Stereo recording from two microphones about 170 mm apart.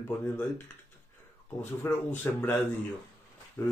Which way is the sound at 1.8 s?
10° left (ahead or behind).